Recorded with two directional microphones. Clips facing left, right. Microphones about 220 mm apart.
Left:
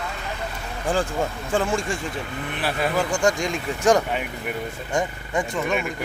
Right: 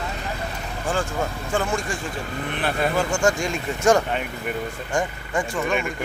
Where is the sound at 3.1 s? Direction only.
20° left (ahead or behind).